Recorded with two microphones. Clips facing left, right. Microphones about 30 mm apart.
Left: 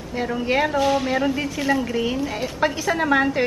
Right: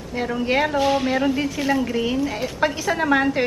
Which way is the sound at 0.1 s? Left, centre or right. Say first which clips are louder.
Right 1 dB; centre.